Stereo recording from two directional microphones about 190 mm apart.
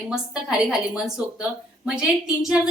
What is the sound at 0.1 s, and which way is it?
A woman's voice, 5° right (ahead or behind).